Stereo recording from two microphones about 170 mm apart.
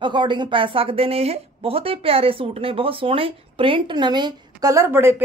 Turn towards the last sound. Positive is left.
turn(degrees=-15)  # may be behind; listen again after turning